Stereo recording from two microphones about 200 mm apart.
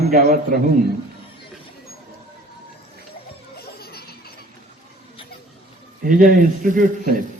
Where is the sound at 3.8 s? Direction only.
50° left (ahead or behind).